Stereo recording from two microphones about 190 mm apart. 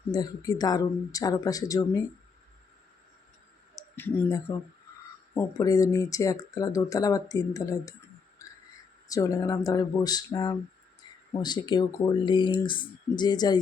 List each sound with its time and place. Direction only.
0.1 s speech: 20° left (ahead or behind)
3.8 s speech: 10° left (ahead or behind)
9.0 s speech: 15° left (ahead or behind)